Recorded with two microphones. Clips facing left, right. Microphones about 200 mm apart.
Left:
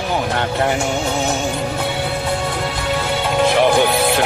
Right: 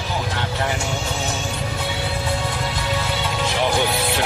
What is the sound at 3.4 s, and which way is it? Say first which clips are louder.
Music: left 8 dB; 60° left (ahead or behind).